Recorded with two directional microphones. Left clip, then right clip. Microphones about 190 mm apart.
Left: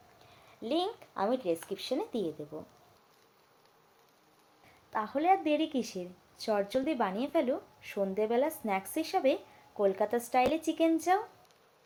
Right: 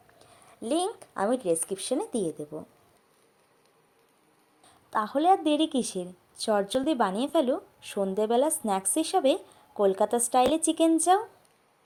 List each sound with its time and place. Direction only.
0.6 s a woman's voice: 25° right (ahead or behind)
4.9 s a woman's voice: 25° right (ahead or behind)